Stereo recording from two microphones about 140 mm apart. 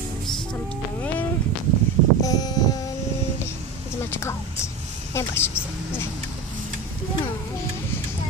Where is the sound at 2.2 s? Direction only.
25° left (ahead or behind).